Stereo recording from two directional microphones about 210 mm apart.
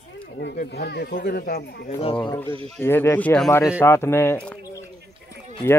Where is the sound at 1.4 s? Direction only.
45° left (ahead or behind).